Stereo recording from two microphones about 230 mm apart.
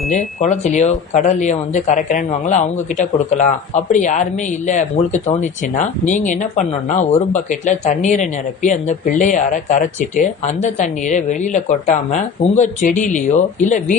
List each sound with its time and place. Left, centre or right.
0.2 s speech: left